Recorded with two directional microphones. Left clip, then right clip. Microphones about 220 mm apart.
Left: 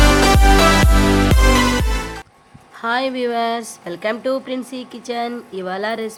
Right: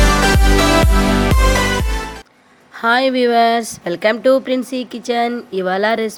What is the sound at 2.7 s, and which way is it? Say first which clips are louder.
Speech: right 6 dB; 20° right (ahead or behind).